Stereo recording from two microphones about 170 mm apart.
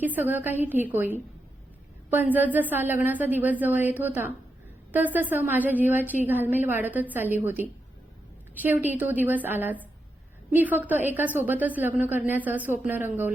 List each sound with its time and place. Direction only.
0.0 s a woman's voice: 10° right (ahead or behind)